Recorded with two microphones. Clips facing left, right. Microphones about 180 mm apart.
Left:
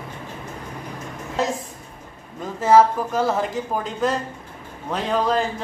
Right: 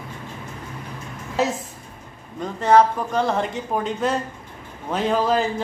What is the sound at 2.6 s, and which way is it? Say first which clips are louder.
Speech: left 1 dB; 5° left (ahead or behind).